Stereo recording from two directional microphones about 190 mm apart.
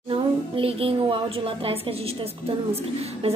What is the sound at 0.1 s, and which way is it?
A woman's voice, 30° right (ahead or behind).